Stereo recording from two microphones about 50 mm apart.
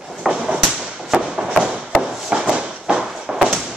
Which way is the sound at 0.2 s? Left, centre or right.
Centre.